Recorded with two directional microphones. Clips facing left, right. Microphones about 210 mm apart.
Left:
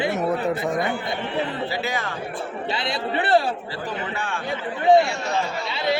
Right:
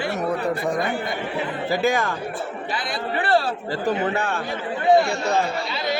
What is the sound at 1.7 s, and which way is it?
Speech, 45° right (ahead or behind).